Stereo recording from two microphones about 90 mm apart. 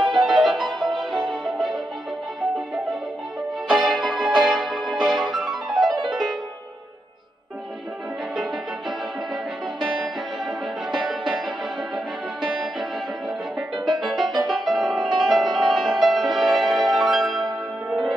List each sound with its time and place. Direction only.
0.0 s music: centre (ahead or behind)
3.6 s music: centre (ahead or behind)
10.4 s music: centre (ahead or behind)
14.0 s music: centre (ahead or behind)